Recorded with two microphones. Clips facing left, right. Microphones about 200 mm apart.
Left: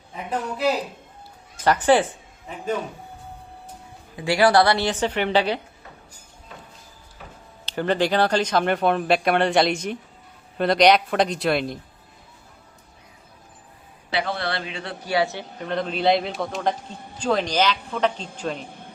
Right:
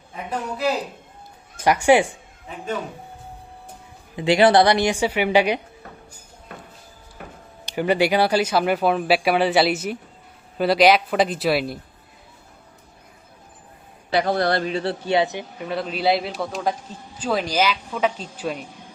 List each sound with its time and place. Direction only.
0.3 s speech: centre (ahead or behind)
1.6 s a man's voice: 10° right (ahead or behind)
4.2 s a man's voice: 20° right (ahead or behind)
7.6 s speech: 15° right (ahead or behind)
14.1 s a man's voice: 45° right (ahead or behind); by 18.6 s 10° right (ahead or behind)